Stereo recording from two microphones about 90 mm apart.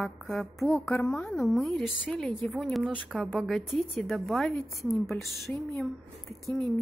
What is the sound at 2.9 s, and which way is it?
Speech, 10° right (ahead or behind).